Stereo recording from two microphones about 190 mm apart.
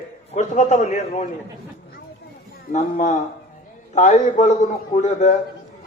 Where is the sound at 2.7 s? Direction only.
40° left (ahead or behind).